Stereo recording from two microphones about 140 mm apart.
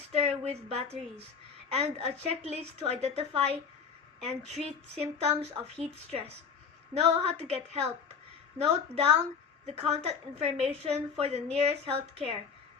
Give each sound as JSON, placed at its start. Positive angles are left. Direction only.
{"t": 0.1, "sound": "a woman's voice", "side_deg": -50}